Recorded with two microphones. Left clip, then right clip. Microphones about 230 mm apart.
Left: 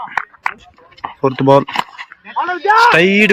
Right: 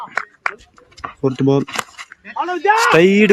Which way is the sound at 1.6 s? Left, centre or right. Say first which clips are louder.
Left 5 dB; centre.